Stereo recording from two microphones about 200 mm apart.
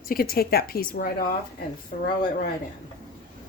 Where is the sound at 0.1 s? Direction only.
50° left (ahead or behind).